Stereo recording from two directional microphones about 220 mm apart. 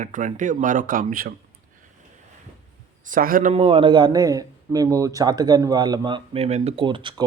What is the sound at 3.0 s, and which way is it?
Speech, 40° right (ahead or behind).